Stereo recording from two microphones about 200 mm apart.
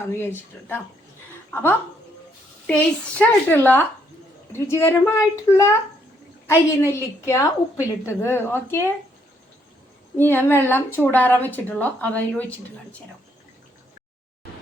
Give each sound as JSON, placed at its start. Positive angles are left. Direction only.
{"t": 0.1, "sound": "a woman's voice", "side_deg": 10}
{"t": 10.2, "sound": "a woman's voice", "side_deg": 10}